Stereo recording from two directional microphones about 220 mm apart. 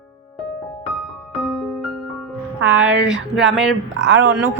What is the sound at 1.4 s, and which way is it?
Music, centre (ahead or behind).